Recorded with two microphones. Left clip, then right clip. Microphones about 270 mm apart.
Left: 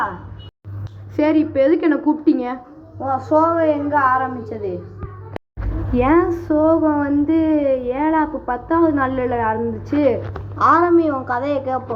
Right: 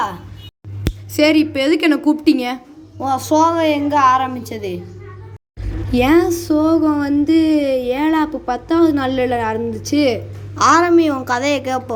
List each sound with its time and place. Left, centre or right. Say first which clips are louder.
1.1 s a woman's voice: right 2 dB; centre
3.0 s a woman's voice: right 2 dB; right
5.9 s a woman's voice: right 2 dB; right